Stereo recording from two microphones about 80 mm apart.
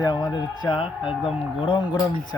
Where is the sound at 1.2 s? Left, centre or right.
Left.